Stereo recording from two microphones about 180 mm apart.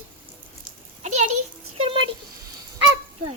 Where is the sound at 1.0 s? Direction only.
40° right (ahead or behind).